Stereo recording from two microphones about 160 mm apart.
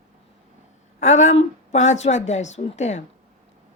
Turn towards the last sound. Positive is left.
turn(degrees=45)  # may be behind; listen again after turning